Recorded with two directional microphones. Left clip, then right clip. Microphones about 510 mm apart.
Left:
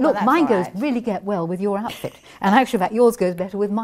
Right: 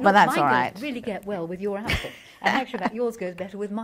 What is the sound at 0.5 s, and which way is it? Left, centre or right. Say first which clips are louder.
Speech: left 1 dB; right.